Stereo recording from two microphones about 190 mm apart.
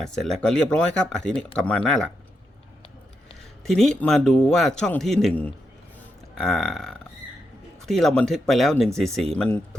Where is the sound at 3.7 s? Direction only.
Centre (ahead or behind).